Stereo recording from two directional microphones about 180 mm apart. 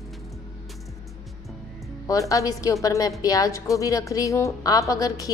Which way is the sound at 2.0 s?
20° left (ahead or behind).